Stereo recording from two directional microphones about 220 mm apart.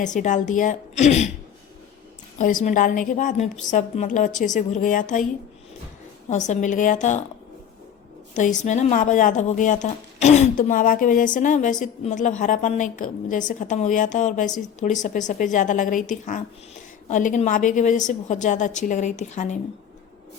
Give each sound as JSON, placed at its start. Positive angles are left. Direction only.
{"t": 0.0, "sound": "speech", "side_deg": 35}
{"t": 2.4, "sound": "speech", "side_deg": 35}
{"t": 6.3, "sound": "speech", "side_deg": 35}
{"t": 8.4, "sound": "speech", "side_deg": 35}